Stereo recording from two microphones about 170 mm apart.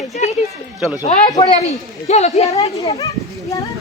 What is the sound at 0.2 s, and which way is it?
Speech, 40° left (ahead or behind).